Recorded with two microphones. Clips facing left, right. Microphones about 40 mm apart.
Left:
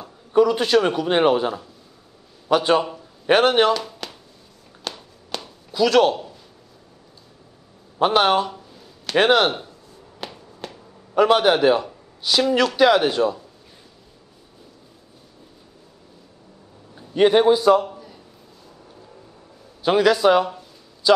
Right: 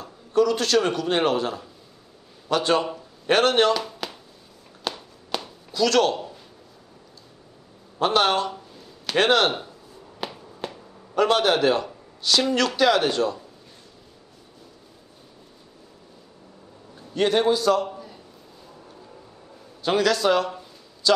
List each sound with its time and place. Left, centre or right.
0.0 s a man's voice: centre
3.7 s chop: centre
4.8 s a sound: centre
5.7 s a man's voice: centre
8.0 s a man's voice: centre
8.5 s a sound: centre
9.1 s a man's voice: centre
9.5 s speech: centre
10.2 s finger snapping: centre
11.1 s a man's voice: centre
17.1 s a man's voice: centre
17.8 s a sound: centre
19.8 s a man's voice: centre